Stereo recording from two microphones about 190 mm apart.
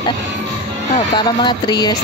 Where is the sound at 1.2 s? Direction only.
25° left (ahead or behind).